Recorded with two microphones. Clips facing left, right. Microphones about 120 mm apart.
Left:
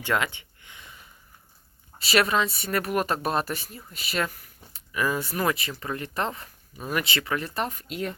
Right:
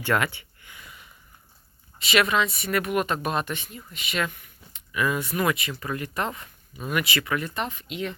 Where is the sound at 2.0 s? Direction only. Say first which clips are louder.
Even; 35° left (ahead or behind).